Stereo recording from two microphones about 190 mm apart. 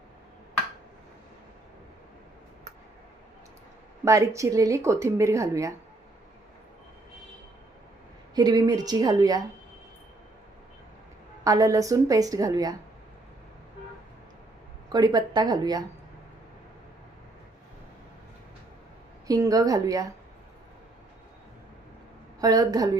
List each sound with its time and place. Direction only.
4.0 s speech: 15° right (ahead or behind)
8.4 s a woman's voice: 20° right (ahead or behind)
11.4 s speech: 20° right (ahead or behind)
14.9 s a woman's voice: 20° right (ahead or behind)
19.3 s a woman's voice: 20° right (ahead or behind)
22.4 s a woman's voice: 20° right (ahead or behind)